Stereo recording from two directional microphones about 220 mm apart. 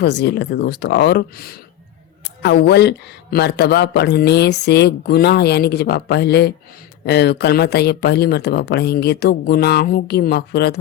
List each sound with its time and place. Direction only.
0.0 s speech: 50° left (ahead or behind)